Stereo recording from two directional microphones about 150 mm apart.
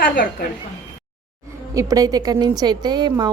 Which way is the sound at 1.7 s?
20° right (ahead or behind).